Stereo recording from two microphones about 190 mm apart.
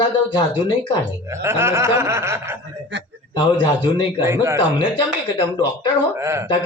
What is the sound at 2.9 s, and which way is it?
Speech, 70° right (ahead or behind).